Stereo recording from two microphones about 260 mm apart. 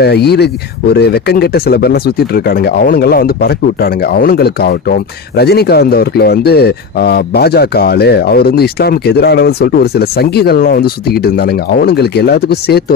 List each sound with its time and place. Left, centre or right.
0.0 s speech: left